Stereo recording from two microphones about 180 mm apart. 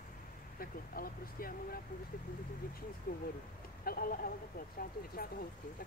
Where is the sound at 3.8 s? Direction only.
55° left (ahead or behind).